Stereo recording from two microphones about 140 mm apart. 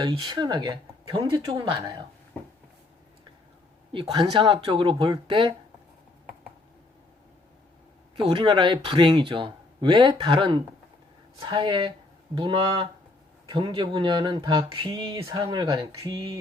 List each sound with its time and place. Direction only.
0.0 s speech: 35° right (ahead or behind)
4.0 s speech: 35° right (ahead or behind)
8.1 s speech: 40° right (ahead or behind)